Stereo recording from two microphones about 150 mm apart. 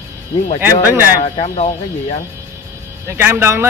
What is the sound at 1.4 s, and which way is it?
Speech, 50° left (ahead or behind).